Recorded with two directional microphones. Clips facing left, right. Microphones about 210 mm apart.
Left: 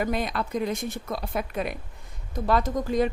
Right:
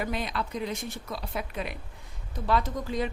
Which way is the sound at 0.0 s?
45° left (ahead or behind).